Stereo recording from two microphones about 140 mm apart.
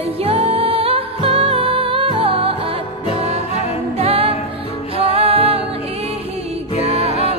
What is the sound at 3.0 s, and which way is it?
Music, 50° left (ahead or behind).